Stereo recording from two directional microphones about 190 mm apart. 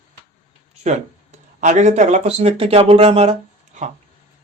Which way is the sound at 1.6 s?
40° right (ahead or behind).